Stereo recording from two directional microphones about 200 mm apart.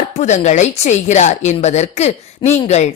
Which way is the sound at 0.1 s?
35° left (ahead or behind).